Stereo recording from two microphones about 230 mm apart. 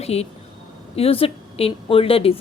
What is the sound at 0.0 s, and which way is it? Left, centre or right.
A woman's voice, left.